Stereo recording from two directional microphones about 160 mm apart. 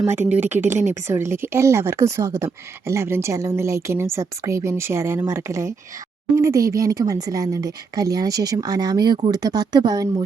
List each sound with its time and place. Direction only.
0.0 s speech: 15° right (ahead or behind)